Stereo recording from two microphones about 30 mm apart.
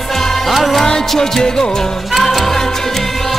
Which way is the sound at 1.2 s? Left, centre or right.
Centre.